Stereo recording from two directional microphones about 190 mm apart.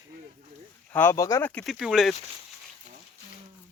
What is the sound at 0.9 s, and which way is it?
Speech, 15° left (ahead or behind).